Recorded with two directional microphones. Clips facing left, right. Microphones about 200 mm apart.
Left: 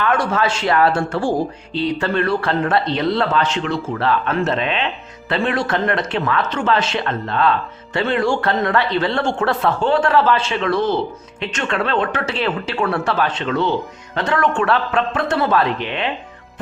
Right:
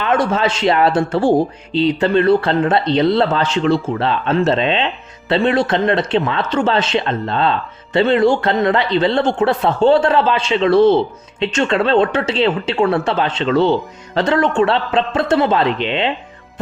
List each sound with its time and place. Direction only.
0.0 s speech: 20° right (ahead or behind)